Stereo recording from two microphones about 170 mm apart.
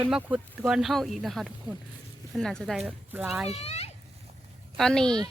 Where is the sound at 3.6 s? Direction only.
40° left (ahead or behind).